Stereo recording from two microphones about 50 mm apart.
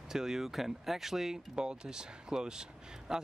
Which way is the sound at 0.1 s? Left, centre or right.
Centre.